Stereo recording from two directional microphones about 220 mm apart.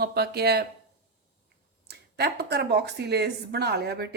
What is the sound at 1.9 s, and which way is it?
Speech, 50° right (ahead or behind).